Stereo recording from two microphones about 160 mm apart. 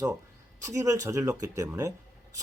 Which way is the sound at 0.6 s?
20° right (ahead or behind).